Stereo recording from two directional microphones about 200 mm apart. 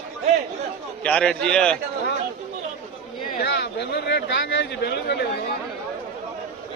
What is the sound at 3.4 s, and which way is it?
A man's voice, 60° left (ahead or behind).